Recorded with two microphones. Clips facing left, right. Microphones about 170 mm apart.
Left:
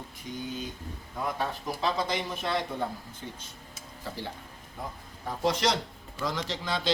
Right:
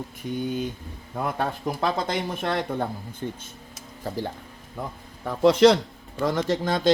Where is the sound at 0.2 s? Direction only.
60° right (ahead or behind); by 4.2 s 40° right (ahead or behind).